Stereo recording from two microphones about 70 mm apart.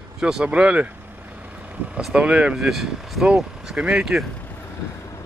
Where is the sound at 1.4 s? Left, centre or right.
Right.